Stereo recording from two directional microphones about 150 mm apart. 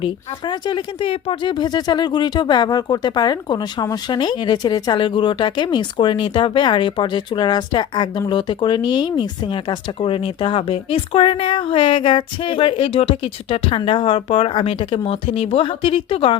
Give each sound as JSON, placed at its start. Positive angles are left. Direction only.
{"t": 0.0, "sound": "speech", "side_deg": 35}